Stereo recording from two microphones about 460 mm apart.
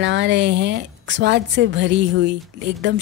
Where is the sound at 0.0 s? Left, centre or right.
Right.